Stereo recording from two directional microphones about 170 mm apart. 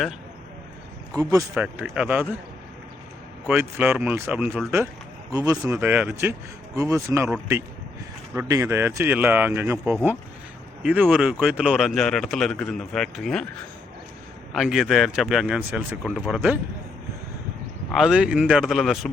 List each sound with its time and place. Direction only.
1.1 s speech: 20° right (ahead or behind)
1.5 s speech: 5° right (ahead or behind)
3.4 s speech: 10° right (ahead or behind)
5.3 s speech: 20° right (ahead or behind)
5.7 s speech: 10° right (ahead or behind)
8.4 s speech: 15° right (ahead or behind); by 13.4 s centre (ahead or behind)
14.5 s speech: centre (ahead or behind)
17.9 s speech: 5° right (ahead or behind)